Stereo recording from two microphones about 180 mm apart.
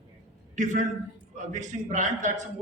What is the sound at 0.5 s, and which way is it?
A man's voice, 45° right (ahead or behind).